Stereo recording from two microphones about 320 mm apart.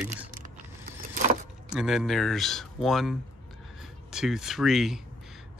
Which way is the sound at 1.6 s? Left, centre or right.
Centre.